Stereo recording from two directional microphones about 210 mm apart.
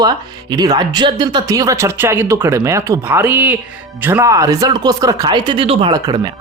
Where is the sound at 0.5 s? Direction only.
20° right (ahead or behind).